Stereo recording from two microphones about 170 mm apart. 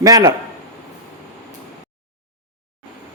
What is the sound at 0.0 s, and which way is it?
Speech, 20° right (ahead or behind).